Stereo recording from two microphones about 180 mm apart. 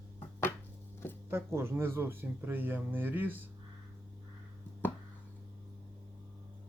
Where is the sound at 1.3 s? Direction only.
15° right (ahead or behind).